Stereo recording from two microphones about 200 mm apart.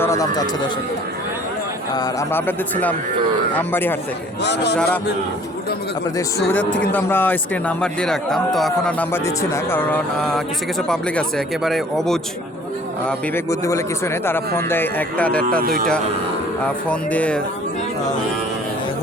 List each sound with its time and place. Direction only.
0.0 s speech: 15° left (ahead or behind)
1.9 s a man's voice: 20° left (ahead or behind)
4.4 s speech: 55° left (ahead or behind)
6.9 s a man's voice: 10° left (ahead or behind)
13.1 s a man's voice: 15° left (ahead or behind)
15.6 s speech: 50° right (ahead or behind)
16.6 s a man's voice: 5° left (ahead or behind)